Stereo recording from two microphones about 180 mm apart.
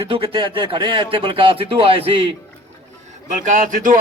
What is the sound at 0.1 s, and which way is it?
Speech, 30° right (ahead or behind).